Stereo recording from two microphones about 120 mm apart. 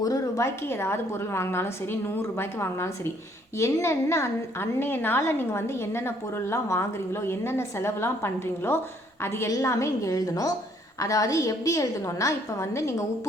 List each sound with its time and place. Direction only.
0.0 s a woman's voice: 30° left (ahead or behind)